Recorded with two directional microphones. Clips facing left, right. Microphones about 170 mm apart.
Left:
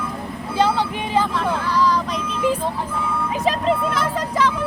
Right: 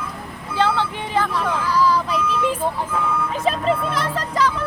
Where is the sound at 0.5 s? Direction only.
15° left (ahead or behind).